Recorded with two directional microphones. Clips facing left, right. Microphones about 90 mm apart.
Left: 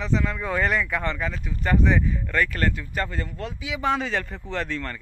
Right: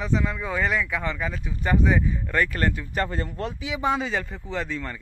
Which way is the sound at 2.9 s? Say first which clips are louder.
Right 2 dB; 30° right (ahead or behind).